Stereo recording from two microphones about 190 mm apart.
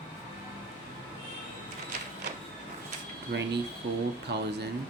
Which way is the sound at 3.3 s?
55° right (ahead or behind).